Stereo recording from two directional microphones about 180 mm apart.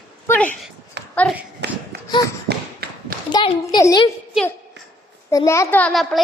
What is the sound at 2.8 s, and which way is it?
Clapping, 60° right (ahead or behind).